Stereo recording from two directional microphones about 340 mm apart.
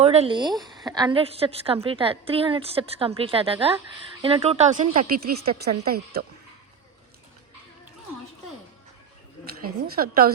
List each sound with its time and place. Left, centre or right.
0.0 s a woman's voice: centre
9.8 s speech: right